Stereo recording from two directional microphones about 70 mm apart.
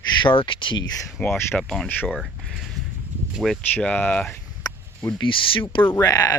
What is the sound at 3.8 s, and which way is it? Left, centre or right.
Speech, left.